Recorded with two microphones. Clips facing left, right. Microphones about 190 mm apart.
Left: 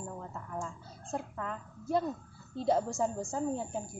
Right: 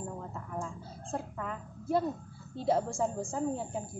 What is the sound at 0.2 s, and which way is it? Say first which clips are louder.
A woman's voice: right 1 dB; centre (ahead or behind).